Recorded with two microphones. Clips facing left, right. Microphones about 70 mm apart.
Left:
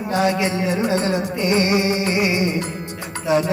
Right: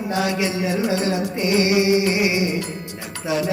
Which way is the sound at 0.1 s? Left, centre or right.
Left.